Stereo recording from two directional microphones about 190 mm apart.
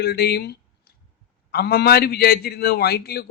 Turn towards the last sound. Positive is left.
turn(degrees=55)  # may be behind; listen again after turning